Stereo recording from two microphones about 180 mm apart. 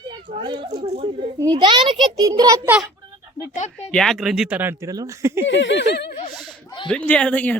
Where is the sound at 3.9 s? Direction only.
Centre (ahead or behind); by 5.5 s 15° right (ahead or behind).